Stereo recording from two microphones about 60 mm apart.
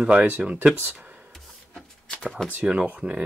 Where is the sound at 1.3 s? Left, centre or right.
Centre.